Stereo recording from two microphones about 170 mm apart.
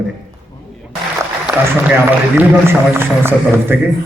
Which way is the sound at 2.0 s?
10° right (ahead or behind).